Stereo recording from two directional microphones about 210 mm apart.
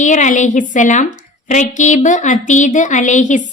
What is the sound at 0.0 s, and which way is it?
A woman's voice, 35° left (ahead or behind).